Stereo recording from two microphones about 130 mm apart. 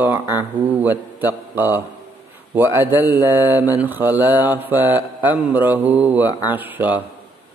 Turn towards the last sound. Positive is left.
turn(degrees=-15)  # may be behind; listen again after turning